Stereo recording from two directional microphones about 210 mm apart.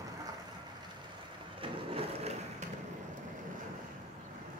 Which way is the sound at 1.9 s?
30° right (ahead or behind).